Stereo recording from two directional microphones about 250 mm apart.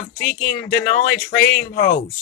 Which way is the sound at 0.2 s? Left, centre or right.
Left.